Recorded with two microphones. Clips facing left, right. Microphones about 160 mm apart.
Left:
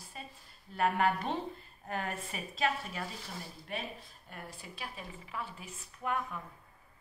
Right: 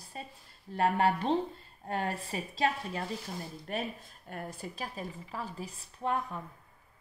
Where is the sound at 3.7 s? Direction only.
45° right (ahead or behind).